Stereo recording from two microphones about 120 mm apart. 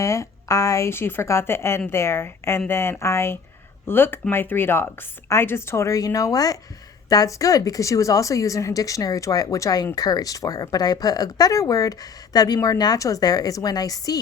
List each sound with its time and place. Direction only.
0.0 s a woman's voice: 25° left (ahead or behind)